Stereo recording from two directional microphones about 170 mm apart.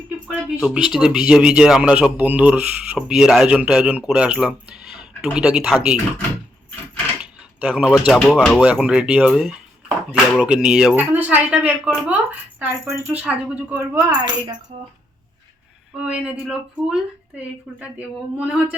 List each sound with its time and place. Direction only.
0.3 s speech: 5° right (ahead or behind)
7.2 s door: 10° right (ahead or behind)
8.0 s speech: 5° right (ahead or behind)
14.2 s speech: 25° right (ahead or behind)
16.0 s speech: 5° right (ahead or behind)